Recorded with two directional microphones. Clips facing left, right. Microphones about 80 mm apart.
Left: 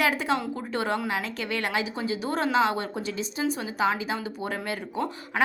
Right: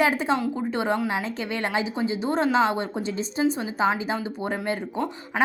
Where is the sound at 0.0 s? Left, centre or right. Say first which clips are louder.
Right 3 dB; right.